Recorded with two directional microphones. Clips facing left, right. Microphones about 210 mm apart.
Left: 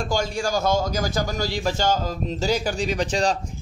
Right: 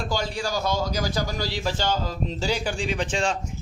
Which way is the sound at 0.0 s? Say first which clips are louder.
Left 3 dB; 45° left (ahead or behind).